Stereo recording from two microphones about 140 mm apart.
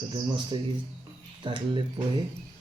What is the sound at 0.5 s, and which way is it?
Speech, 35° right (ahead or behind).